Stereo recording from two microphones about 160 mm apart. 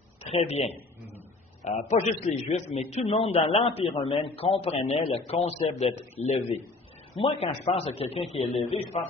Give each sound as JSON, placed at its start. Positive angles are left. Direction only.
{"t": 0.2, "sound": "a man's voice", "side_deg": 40}
{"t": 7.2, "sound": "a man's voice", "side_deg": 35}